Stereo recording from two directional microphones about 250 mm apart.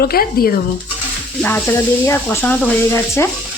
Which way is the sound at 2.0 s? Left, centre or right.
Centre.